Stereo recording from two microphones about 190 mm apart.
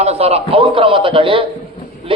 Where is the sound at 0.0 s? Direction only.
35° right (ahead or behind).